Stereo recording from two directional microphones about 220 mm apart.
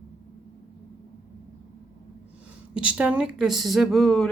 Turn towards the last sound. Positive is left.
turn(degrees=0)  # may be behind; listen again after turning